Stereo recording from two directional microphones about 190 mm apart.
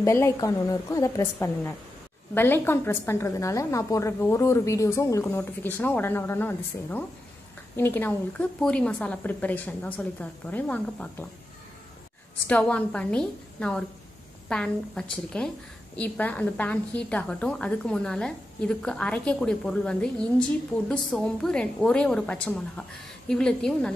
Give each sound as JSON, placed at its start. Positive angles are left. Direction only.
{"t": 0.0, "sound": "a woman's voice", "side_deg": 15}
{"t": 12.4, "sound": "a woman's voice", "side_deg": 5}